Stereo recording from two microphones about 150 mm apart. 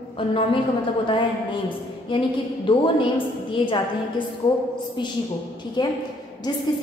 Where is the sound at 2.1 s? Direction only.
35° left (ahead or behind).